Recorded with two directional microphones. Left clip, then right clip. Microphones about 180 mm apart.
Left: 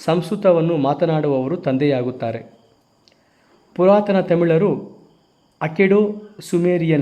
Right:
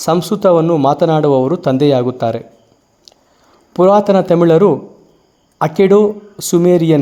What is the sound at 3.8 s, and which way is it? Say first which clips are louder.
Speech: right 5 dB; 30° right (ahead or behind).